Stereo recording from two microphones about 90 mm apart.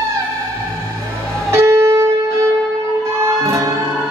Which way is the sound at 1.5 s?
30° right (ahead or behind).